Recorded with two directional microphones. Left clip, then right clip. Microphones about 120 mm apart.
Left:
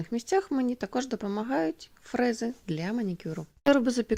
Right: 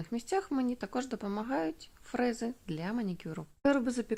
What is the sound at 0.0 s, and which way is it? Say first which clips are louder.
Speech: left 6 dB; 40° left (ahead or behind).